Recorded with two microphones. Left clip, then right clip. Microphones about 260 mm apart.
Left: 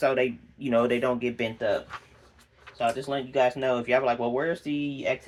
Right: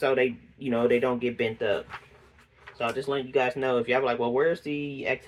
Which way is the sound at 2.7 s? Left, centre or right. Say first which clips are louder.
Left 1 dB; centre.